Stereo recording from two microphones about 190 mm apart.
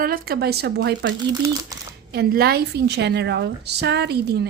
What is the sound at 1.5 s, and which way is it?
Speech, 20° right (ahead or behind).